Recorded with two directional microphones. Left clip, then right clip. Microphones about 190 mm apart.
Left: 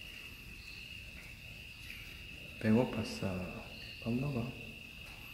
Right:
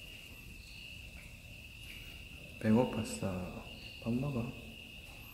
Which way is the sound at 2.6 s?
5° left (ahead or behind).